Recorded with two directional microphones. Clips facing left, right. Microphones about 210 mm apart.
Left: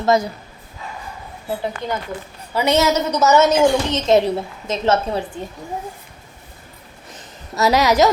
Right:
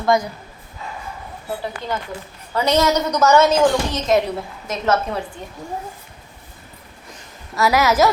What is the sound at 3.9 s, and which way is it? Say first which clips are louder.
A woman's voice: left 3 dB; 30° left (ahead or behind).